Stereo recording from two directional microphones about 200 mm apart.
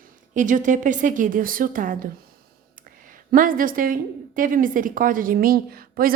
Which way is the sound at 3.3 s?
45° right (ahead or behind).